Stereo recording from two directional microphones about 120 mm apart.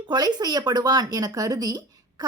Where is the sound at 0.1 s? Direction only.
35° right (ahead or behind).